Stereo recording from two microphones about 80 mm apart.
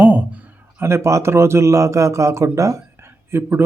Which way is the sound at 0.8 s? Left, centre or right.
Right.